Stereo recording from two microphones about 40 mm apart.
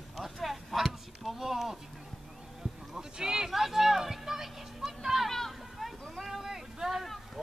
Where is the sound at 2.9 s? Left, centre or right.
Centre.